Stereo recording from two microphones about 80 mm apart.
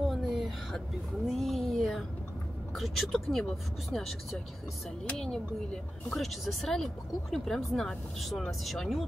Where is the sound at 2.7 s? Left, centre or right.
Centre.